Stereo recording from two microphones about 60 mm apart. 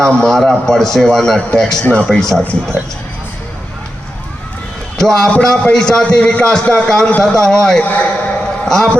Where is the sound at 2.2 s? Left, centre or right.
Centre.